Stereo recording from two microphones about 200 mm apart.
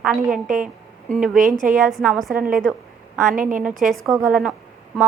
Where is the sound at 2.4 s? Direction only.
45° right (ahead or behind).